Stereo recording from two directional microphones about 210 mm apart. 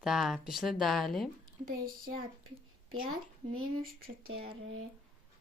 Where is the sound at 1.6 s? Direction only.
40° right (ahead or behind).